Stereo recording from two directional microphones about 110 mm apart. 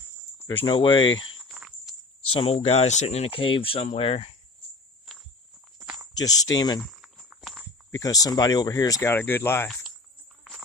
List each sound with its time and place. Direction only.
0.4 s speech: 45° left (ahead or behind)
1.5 s cricket: 5° right (ahead or behind)
2.3 s speech: 60° left (ahead or behind)
5.1 s walk: centre (ahead or behind)
6.1 s speech: 35° left (ahead or behind)
6.8 s walk: centre (ahead or behind)
7.9 s speech: 30° left (ahead or behind)
9.0 s speech: 20° left (ahead or behind)